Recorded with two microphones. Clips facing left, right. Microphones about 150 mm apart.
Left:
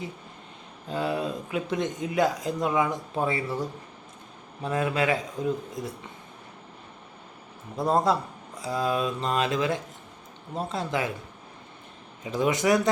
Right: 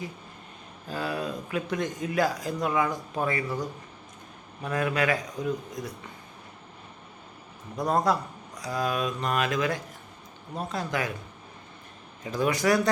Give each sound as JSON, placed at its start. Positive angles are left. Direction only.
{"t": 0.9, "sound": "speech", "side_deg": 20}
{"t": 4.6, "sound": "speech", "side_deg": 25}
{"t": 7.8, "sound": "speech", "side_deg": 25}
{"t": 12.2, "sound": "speech", "side_deg": 20}